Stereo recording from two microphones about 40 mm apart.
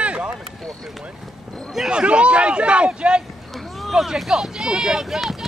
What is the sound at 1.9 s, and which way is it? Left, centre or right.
Speech, right.